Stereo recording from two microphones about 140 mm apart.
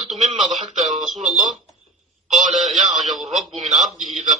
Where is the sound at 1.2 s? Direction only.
55° right (ahead or behind).